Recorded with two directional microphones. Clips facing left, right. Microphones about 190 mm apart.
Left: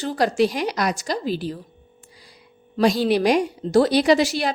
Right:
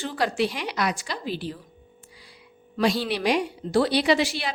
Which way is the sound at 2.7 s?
40° left (ahead or behind).